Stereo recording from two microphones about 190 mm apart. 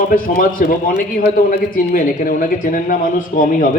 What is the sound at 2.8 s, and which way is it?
Speech, 45° left (ahead or behind).